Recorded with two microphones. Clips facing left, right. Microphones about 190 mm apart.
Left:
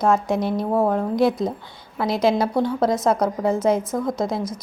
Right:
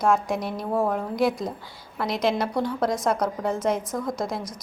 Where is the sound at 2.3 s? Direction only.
25° left (ahead or behind).